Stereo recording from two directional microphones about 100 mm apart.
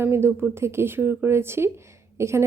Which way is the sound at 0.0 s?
25° right (ahead or behind).